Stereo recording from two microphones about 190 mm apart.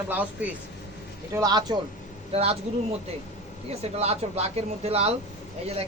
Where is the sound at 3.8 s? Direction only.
35° right (ahead or behind).